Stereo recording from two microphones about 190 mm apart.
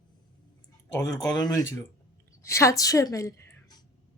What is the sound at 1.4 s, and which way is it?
A woman's voice, 20° left (ahead or behind).